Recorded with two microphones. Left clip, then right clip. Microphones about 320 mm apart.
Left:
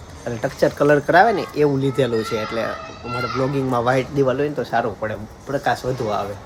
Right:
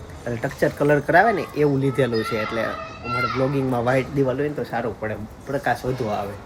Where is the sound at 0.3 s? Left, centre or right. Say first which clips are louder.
Left 3 dB; centre.